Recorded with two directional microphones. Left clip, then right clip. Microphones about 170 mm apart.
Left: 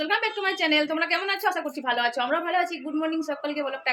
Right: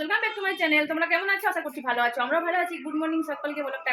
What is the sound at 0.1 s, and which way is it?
Speech, 10° left (ahead or behind).